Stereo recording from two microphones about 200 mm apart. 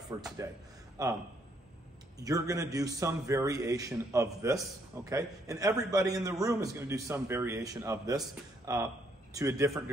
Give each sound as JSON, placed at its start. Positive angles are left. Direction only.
{"t": 0.1, "sound": "a man's voice", "side_deg": -20}